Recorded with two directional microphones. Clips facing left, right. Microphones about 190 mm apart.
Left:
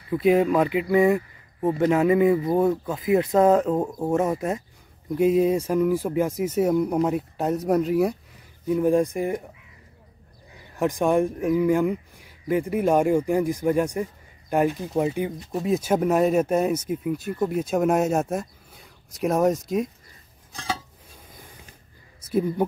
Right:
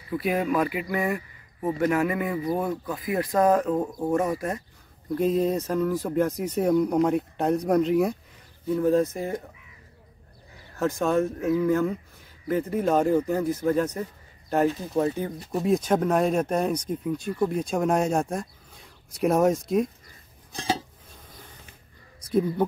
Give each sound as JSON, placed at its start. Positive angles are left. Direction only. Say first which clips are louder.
{"t": 0.2, "sound": "speech", "louder": "left 6 dB", "side_deg": 25}
{"t": 8.6, "sound": "speech", "louder": "left 2 dB", "side_deg": 15}
{"t": 10.8, "sound": "speech", "louder": "left 2 dB", "side_deg": 15}
{"t": 15.5, "sound": "speech", "louder": "right 1 dB", "side_deg": 0}